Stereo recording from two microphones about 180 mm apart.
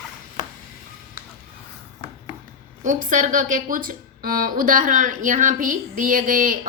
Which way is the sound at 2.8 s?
45° right (ahead or behind).